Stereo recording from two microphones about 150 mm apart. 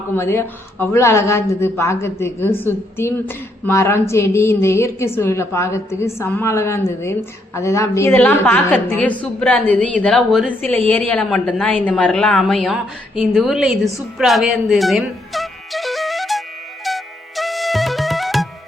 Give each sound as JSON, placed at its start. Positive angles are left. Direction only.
{"t": 0.2, "sound": "a woman's voice", "side_deg": 15}
{"t": 16.8, "sound": "music", "side_deg": 0}